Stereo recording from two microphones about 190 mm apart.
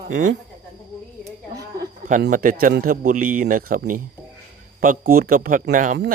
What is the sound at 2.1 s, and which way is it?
A man's voice, 45° right (ahead or behind).